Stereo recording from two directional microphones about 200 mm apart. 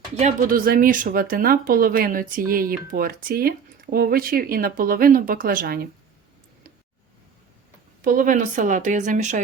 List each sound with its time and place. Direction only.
0.2 s speech: 40° right (ahead or behind)
8.0 s a woman's voice: 45° right (ahead or behind)